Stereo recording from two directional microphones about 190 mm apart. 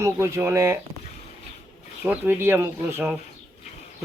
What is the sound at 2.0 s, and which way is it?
Speech, 10° right (ahead or behind).